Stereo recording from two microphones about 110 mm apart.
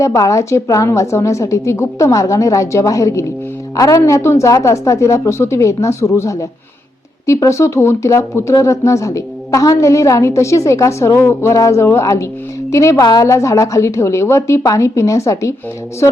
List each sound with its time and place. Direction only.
0.2 s speech: 30° left (ahead or behind)